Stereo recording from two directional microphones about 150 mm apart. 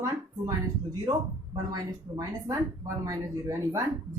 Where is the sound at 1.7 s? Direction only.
25° right (ahead or behind).